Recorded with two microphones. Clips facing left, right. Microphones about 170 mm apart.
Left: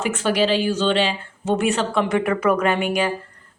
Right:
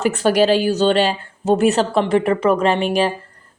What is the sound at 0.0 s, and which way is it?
A woman's voice, 40° right (ahead or behind).